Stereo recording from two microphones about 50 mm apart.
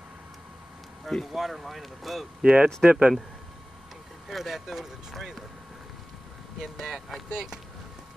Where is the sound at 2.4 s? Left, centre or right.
Centre.